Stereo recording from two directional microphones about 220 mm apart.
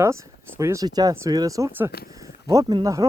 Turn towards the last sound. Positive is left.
turn(degrees=-15)  # may be behind; listen again after turning